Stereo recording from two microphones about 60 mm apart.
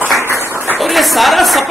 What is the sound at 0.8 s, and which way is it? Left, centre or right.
Speech, centre.